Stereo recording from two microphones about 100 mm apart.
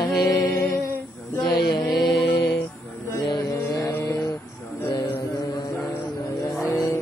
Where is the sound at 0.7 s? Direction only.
25° left (ahead or behind).